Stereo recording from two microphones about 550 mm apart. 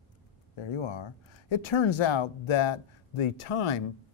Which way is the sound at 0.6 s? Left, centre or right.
Left.